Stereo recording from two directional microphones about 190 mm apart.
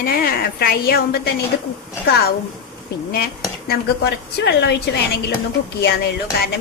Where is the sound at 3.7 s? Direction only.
55° left (ahead or behind).